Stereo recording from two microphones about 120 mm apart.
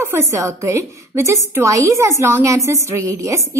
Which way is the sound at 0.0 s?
25° right (ahead or behind).